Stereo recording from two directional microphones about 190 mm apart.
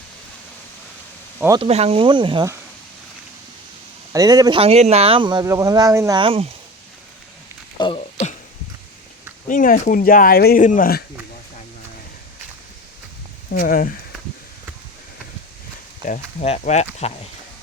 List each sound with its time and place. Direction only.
1.5 s speech: 30° right (ahead or behind)
4.1 s speech: 20° right (ahead or behind)
7.8 s speech: 25° left (ahead or behind)
9.5 s speech: 45° left (ahead or behind)
13.5 s speech: 50° left (ahead or behind)
16.0 s speech: 40° left (ahead or behind)